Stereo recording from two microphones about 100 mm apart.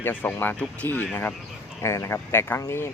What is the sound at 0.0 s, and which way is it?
Speech, 20° left (ahead or behind).